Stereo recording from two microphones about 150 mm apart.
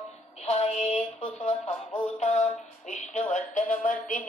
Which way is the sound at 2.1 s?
50° left (ahead or behind).